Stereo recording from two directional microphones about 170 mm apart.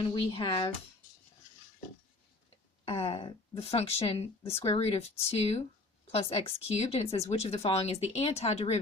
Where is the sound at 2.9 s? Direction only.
35° left (ahead or behind).